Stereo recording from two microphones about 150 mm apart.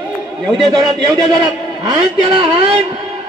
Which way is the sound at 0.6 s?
25° right (ahead or behind).